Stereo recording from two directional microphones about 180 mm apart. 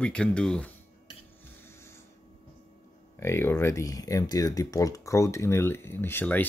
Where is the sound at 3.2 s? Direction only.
15° left (ahead or behind).